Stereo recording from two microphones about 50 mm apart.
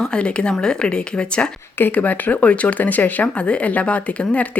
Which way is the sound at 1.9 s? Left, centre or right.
Left.